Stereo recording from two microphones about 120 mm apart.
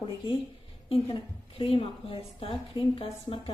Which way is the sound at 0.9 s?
45° left (ahead or behind).